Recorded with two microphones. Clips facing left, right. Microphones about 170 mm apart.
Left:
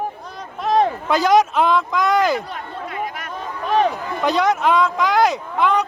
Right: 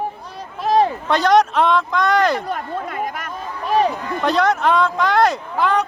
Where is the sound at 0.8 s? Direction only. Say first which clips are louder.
Left 1 dB; centre (ahead or behind).